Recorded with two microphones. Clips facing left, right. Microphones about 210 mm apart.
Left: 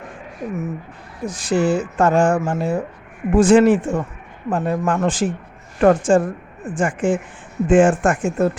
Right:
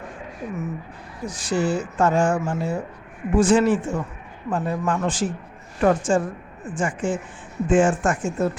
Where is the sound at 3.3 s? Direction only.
75° left (ahead or behind).